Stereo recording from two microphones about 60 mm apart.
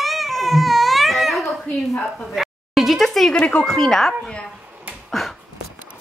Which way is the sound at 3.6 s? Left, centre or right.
Centre.